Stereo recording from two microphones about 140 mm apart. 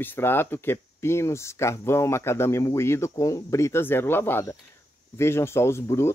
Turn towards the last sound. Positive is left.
turn(degrees=20)  # may be behind; listen again after turning